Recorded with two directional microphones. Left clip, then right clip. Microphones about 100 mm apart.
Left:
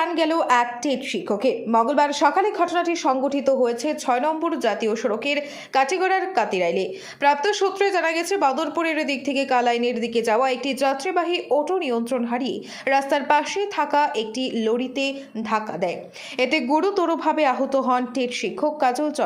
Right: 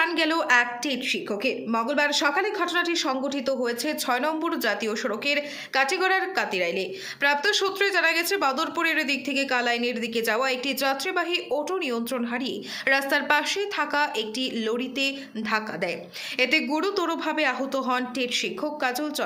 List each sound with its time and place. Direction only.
0.0 s a woman's voice: 20° left (ahead or behind); by 19.1 s 40° left (ahead or behind)